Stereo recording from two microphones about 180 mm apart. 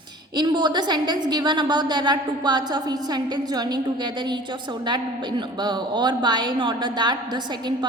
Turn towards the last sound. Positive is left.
turn(degrees=-25)  # may be behind; listen again after turning